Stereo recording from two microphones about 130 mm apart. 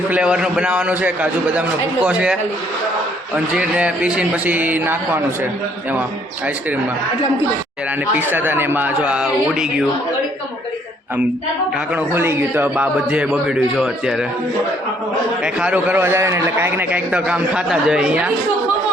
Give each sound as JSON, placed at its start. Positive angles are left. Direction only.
{"t": 0.1, "sound": "a man's voice", "side_deg": -5}
{"t": 8.1, "sound": "a man's voice", "side_deg": -15}
{"t": 11.9, "sound": "a man's voice", "side_deg": -15}
{"t": 15.4, "sound": "a man's voice", "side_deg": -10}